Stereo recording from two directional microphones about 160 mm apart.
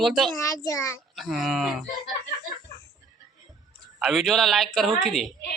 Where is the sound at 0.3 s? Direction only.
20° left (ahead or behind).